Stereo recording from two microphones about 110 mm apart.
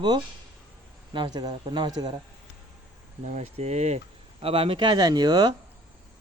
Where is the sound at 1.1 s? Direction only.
40° right (ahead or behind).